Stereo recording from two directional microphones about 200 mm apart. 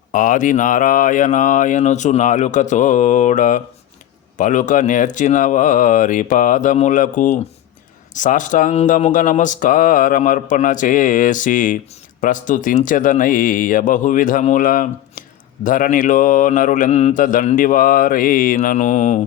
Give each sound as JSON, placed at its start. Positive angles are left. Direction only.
{"t": 0.1, "sound": "speech", "side_deg": 40}